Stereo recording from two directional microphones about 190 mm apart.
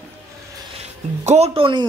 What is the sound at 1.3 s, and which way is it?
Speech, 30° right (ahead or behind).